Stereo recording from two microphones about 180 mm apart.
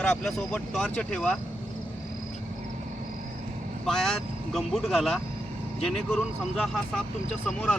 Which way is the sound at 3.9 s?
Centre (ahead or behind).